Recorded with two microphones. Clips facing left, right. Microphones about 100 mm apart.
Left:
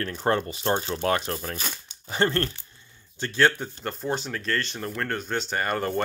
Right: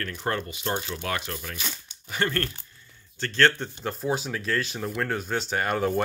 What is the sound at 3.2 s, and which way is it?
Speech, 10° left (ahead or behind).